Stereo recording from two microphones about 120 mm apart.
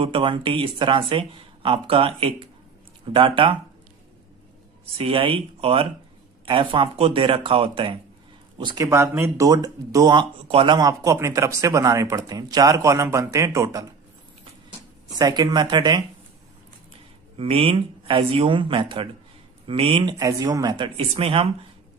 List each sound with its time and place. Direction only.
0.0 s speech: 45° right (ahead or behind)
4.9 s speech: 50° right (ahead or behind)
8.8 s speech: 20° right (ahead or behind)
10.5 s speech: 45° right (ahead or behind)
10.8 s speech: 30° right (ahead or behind)
15.1 s speech: 35° right (ahead or behind)
17.4 s speech: 50° right (ahead or behind)
20.2 s speech: 30° right (ahead or behind); by 21.5 s 55° right (ahead or behind)